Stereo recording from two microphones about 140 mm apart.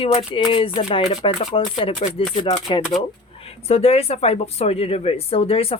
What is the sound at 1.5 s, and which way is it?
Speech, 40° left (ahead or behind).